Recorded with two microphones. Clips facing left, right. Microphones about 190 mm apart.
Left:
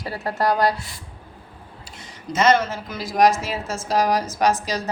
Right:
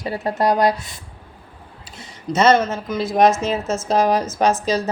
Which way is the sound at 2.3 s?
25° right (ahead or behind).